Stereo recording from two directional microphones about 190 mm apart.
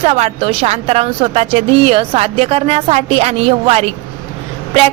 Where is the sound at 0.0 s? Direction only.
30° right (ahead or behind).